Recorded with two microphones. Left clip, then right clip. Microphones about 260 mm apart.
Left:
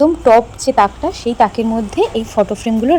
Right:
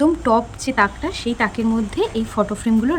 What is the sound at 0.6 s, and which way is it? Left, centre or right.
Speech, centre.